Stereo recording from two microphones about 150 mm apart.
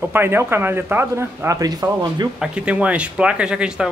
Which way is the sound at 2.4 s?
5° right (ahead or behind).